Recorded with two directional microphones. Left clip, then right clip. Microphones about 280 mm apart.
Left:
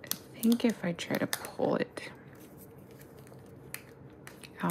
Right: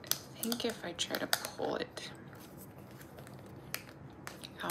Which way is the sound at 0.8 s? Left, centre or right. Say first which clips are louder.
Left 4 dB; centre.